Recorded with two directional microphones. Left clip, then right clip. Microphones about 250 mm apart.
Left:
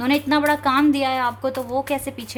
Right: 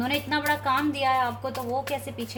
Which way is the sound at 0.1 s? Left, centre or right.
Left.